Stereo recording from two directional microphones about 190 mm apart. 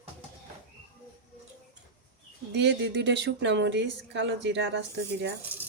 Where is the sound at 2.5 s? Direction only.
65° right (ahead or behind).